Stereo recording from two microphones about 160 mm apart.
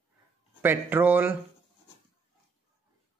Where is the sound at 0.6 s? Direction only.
10° right (ahead or behind).